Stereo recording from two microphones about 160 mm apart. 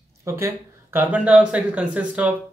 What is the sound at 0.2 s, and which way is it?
Speech, 15° right (ahead or behind).